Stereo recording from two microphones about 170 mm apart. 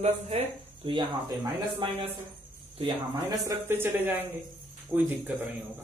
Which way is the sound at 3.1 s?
15° right (ahead or behind).